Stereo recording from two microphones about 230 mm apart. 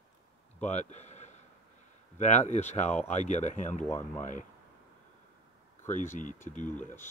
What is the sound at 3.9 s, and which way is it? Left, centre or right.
Speech, centre.